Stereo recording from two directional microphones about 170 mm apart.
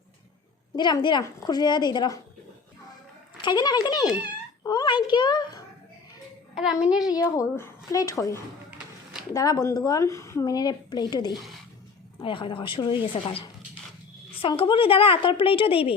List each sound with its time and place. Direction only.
0.8 s a woman's voice: 25° left (ahead or behind)
3.3 s a woman's voice: 25° left (ahead or behind)
6.5 s a child's voice: 5° right (ahead or behind)
7.3 s a woman's voice: 15° left (ahead or behind); by 16.0 s 35° left (ahead or behind)